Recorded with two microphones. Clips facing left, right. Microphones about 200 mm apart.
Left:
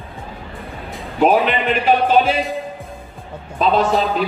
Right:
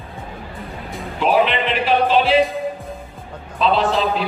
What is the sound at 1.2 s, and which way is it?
A man's voice, 45° left (ahead or behind).